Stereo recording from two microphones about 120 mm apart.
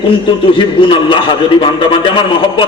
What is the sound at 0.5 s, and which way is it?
A man's voice, 45° left (ahead or behind).